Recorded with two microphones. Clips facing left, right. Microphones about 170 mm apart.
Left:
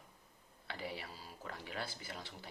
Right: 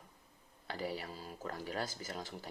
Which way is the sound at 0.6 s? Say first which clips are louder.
Right 5 dB; 40° right (ahead or behind).